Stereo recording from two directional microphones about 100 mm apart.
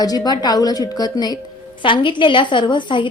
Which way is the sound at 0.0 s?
40° left (ahead or behind).